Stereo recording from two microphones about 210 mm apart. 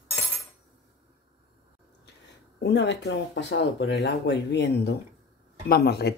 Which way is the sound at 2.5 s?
55° left (ahead or behind).